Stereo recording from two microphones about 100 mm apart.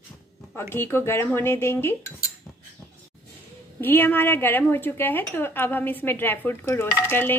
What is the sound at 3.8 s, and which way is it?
Speech, 20° left (ahead or behind).